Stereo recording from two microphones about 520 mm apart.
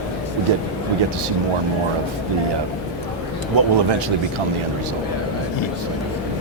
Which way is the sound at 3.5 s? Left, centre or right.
Right.